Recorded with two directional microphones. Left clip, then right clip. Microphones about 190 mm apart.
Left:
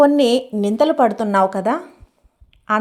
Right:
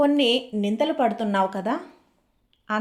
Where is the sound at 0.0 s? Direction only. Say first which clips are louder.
Left 7 dB; 35° left (ahead or behind).